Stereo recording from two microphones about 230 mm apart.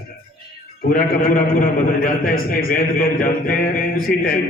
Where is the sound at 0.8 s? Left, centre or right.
Left.